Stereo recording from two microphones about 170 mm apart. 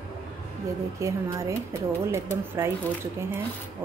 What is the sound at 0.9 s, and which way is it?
Speech, 15° right (ahead or behind).